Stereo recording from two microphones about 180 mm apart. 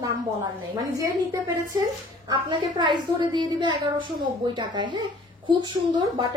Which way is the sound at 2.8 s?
25° right (ahead or behind).